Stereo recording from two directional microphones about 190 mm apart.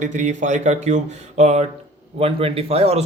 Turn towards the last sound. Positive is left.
turn(degrees=-35)  # may be behind; listen again after turning